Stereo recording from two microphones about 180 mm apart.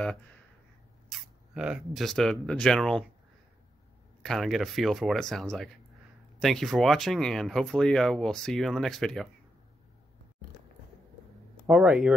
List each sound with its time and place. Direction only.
1.0 s speech: 5° right (ahead or behind)
4.2 s speech: centre (ahead or behind)
11.6 s speech: 5° right (ahead or behind)